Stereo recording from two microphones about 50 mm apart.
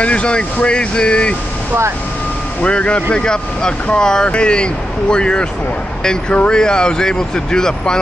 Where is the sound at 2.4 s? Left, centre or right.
Left.